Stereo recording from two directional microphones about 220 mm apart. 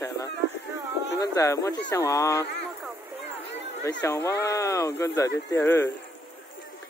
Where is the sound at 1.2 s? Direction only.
15° left (ahead or behind).